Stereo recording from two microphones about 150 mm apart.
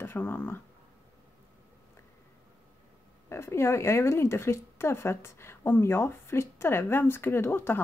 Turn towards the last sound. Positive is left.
turn(degrees=15)  # may be behind; listen again after turning